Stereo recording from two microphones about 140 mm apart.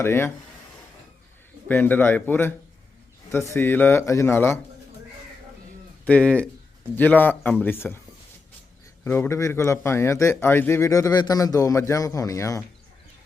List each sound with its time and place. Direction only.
0.0 s a man's voice: 15° left (ahead or behind)
1.6 s a man's voice: 15° left (ahead or behind)
6.1 s a man's voice: 10° left (ahead or behind)
9.0 s a man's voice: 15° left (ahead or behind)